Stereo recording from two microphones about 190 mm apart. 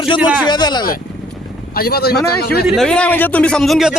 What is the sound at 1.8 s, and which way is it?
Speech, 55° left (ahead or behind).